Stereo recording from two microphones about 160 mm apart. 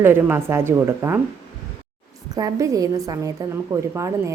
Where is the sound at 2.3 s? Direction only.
20° right (ahead or behind).